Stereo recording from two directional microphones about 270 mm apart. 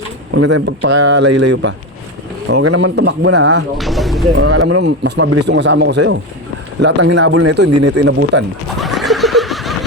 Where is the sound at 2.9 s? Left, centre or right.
Right.